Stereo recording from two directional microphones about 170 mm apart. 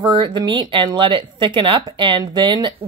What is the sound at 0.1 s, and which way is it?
Speech, 25° right (ahead or behind).